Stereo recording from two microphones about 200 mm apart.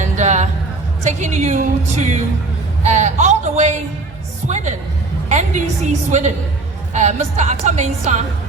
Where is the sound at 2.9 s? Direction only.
35° right (ahead or behind).